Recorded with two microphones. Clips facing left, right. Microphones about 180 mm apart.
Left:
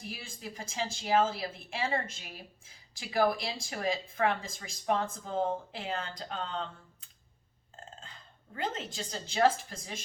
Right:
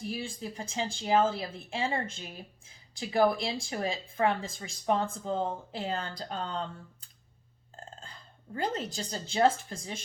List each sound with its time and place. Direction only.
0.1 s speech: 30° right (ahead or behind)
3.0 s speech: 30° right (ahead or behind)
8.5 s speech: 35° right (ahead or behind)